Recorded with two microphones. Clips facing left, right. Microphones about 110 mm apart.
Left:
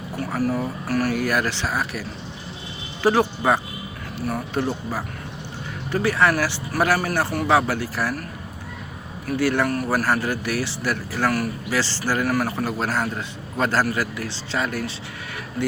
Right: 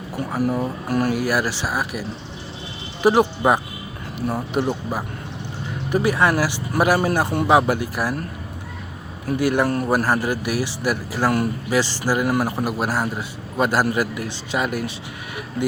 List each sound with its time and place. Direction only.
0.2 s speech: 15° right (ahead or behind)
9.2 s speech: 15° right (ahead or behind)
11.3 s speech: 25° right (ahead or behind)